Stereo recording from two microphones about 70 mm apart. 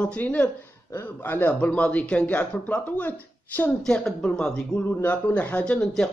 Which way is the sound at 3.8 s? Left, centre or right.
Centre.